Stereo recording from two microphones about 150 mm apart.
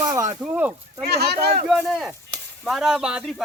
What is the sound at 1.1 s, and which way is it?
Speech, 90° right.